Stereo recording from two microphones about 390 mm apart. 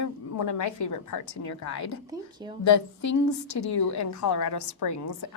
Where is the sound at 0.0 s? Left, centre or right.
Left.